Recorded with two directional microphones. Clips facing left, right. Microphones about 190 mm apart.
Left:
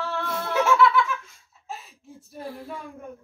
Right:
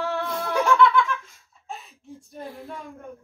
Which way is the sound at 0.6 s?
Centre (ahead or behind).